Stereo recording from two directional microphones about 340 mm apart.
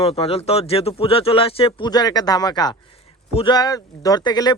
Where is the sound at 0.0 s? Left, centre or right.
Centre.